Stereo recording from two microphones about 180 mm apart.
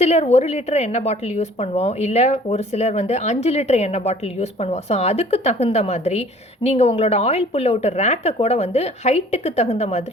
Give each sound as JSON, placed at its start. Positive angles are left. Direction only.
{"t": 0.0, "sound": "a woman's voice", "side_deg": 35}